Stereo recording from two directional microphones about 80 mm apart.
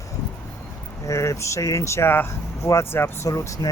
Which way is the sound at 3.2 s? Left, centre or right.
Left.